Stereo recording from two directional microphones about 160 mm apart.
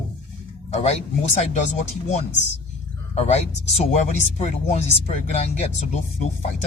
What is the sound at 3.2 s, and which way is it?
Speech, 40° left (ahead or behind).